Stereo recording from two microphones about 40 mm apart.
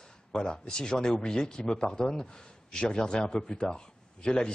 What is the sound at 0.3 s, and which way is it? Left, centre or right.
Speech, centre.